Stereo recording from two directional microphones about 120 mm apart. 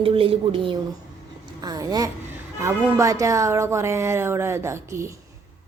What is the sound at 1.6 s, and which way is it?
Speech, 30° right (ahead or behind).